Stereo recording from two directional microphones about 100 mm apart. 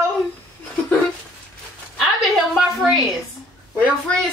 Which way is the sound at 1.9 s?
Centre (ahead or behind).